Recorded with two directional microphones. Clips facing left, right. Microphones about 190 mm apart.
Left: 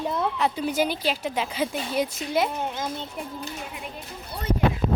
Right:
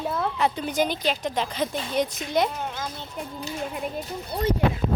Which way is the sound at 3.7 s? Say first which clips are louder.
Right 7 dB; 45° right (ahead or behind).